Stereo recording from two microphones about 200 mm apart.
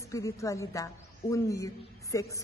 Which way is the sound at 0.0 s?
15° left (ahead or behind).